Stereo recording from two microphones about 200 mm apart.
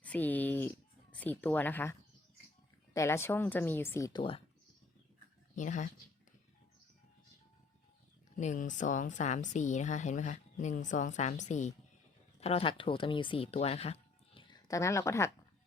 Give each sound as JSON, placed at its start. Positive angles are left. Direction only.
{"t": 0.0, "sound": "a sound", "side_deg": 10}
{"t": 1.1, "sound": "speech", "side_deg": 10}
{"t": 5.5, "sound": "a woman's voice", "side_deg": 40}
{"t": 8.4, "sound": "a woman's voice", "side_deg": 40}